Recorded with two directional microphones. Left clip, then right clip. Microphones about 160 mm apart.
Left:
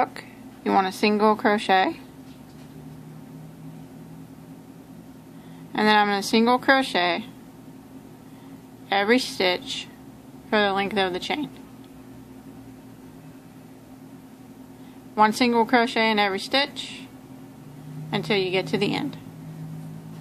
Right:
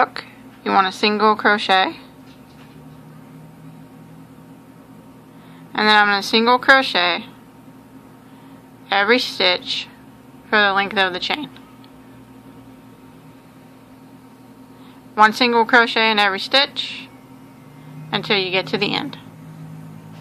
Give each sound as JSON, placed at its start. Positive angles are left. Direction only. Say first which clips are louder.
{"t": 0.0, "sound": "a woman's voice", "louder": "right 6 dB", "side_deg": 10}
{"t": 5.7, "sound": "a woman's voice", "louder": "right 6 dB", "side_deg": 20}
{"t": 8.8, "sound": "a woman's voice", "louder": "right 5 dB", "side_deg": 20}
{"t": 15.1, "sound": "a woman's voice", "louder": "right 6 dB", "side_deg": 20}
{"t": 18.1, "sound": "a woman's voice", "louder": "right 5 dB", "side_deg": 15}